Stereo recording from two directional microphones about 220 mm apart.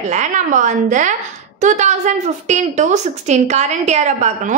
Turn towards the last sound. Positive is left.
turn(degrees=-30)  # may be behind; listen again after turning